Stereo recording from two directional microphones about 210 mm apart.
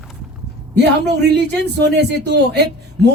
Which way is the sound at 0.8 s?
55° right (ahead or behind).